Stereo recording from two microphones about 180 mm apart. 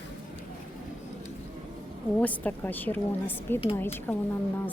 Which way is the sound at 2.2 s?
10° left (ahead or behind).